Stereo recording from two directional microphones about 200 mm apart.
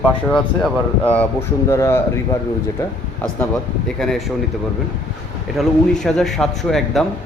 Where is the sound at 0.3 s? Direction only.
5° left (ahead or behind).